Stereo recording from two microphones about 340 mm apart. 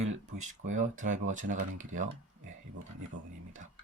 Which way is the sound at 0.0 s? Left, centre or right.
Right.